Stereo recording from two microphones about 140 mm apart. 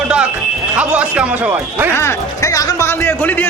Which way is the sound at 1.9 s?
20° left (ahead or behind).